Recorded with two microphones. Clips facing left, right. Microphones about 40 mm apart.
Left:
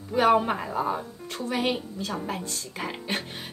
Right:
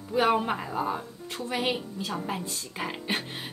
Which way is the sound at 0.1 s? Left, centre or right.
Centre.